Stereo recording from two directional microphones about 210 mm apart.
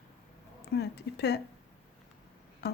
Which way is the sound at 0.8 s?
50° left (ahead or behind).